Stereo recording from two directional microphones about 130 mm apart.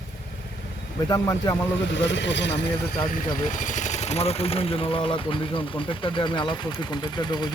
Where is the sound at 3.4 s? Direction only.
75° left (ahead or behind).